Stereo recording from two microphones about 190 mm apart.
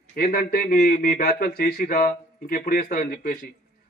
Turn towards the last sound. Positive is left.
turn(degrees=45)  # may be behind; listen again after turning